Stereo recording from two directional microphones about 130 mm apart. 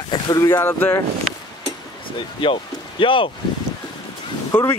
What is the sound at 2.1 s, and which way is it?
Speech, 40° left (ahead or behind).